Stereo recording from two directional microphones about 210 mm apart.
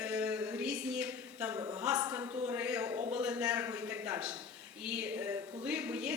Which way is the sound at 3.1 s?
5° right (ahead or behind).